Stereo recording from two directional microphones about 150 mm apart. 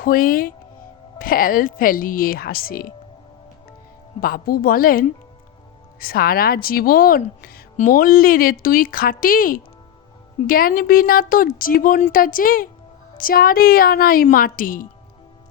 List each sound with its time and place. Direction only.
0.0 s speech: 70° left (ahead or behind)
4.2 s speech: 75° left (ahead or behind)